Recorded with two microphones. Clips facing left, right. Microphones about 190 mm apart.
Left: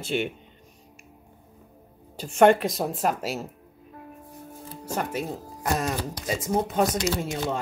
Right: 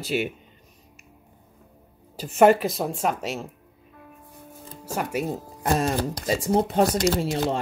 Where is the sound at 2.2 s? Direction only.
5° right (ahead or behind).